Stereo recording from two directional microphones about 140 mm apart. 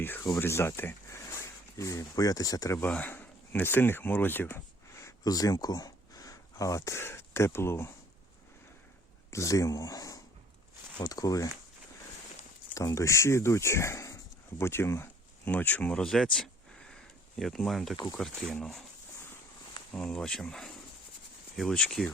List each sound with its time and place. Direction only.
0.0 s speech: 15° left (ahead or behind)
9.3 s speech: 25° left (ahead or behind)
12.7 s speech: 20° left (ahead or behind); by 18.8 s 5° left (ahead or behind)
19.9 s speech: 5° left (ahead or behind)